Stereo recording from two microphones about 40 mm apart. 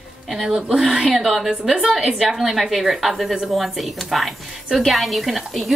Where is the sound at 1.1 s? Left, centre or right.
Centre.